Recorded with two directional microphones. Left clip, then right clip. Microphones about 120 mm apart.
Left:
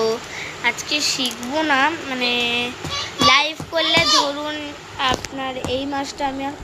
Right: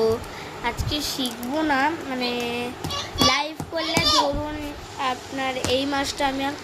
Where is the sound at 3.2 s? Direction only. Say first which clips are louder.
Left 6 dB; 20° right (ahead or behind).